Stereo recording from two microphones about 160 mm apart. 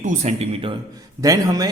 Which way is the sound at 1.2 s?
20° right (ahead or behind).